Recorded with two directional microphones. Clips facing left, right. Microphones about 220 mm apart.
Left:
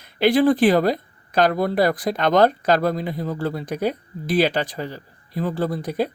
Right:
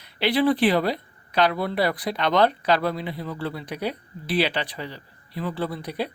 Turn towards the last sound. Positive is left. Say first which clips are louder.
# left 5 dB
turn(degrees=45)  # may be behind; listen again after turning